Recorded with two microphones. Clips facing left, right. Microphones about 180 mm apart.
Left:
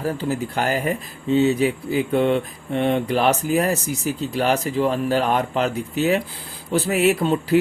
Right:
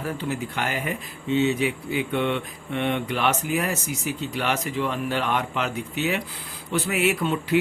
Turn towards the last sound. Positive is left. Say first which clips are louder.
# left 5 dB
turn(degrees=35)  # may be behind; listen again after turning